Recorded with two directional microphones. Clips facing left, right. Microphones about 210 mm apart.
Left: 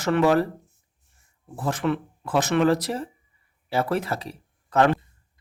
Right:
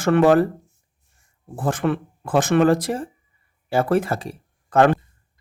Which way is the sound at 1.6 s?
50° right (ahead or behind).